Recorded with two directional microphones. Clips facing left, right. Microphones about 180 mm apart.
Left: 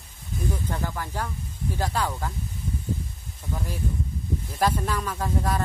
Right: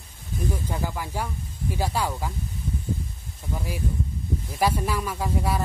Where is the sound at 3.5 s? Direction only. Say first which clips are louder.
Right 1 dB; 10° right (ahead or behind).